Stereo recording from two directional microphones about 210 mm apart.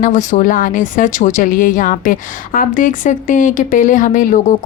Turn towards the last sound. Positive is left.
turn(degrees=40)  # may be behind; listen again after turning